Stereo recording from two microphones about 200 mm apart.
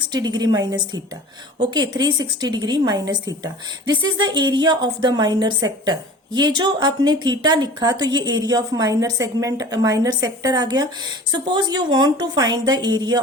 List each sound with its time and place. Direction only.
0.1 s a woman's voice: 20° right (ahead or behind)